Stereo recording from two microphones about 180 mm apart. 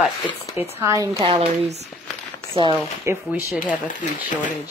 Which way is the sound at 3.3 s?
10° right (ahead or behind).